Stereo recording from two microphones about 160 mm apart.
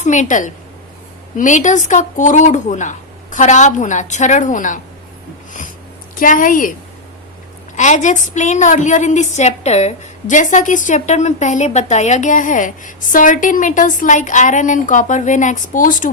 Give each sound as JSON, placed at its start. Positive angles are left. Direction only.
{"t": 0.0, "sound": "a woman's voice", "side_deg": 50}
{"t": 6.1, "sound": "a woman's voice", "side_deg": 55}
{"t": 7.8, "sound": "a woman's voice", "side_deg": 50}